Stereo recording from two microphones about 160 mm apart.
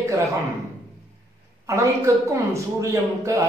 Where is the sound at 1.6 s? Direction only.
20° right (ahead or behind).